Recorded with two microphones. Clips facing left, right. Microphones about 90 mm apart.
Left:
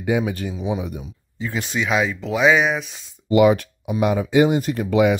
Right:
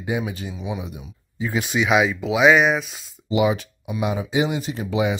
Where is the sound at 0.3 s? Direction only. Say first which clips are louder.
Left 5 dB; 55° left (ahead or behind).